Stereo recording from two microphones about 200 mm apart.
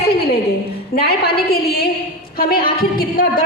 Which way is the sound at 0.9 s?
50° left (ahead or behind).